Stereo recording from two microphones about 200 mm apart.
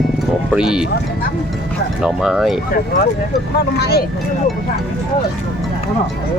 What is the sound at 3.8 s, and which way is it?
Speech, 55° left (ahead or behind).